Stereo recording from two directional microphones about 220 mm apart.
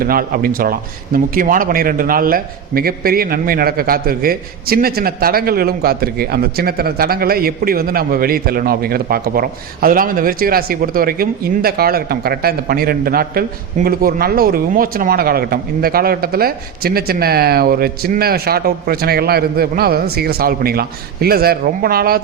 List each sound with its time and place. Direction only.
0.0 s a man's voice: 40° right (ahead or behind)